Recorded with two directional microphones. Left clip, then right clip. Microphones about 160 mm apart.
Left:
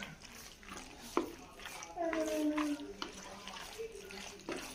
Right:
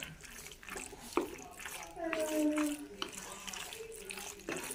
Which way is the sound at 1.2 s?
20° left (ahead or behind).